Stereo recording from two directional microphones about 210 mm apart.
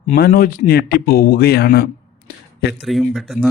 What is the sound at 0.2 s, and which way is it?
Speech, 45° left (ahead or behind).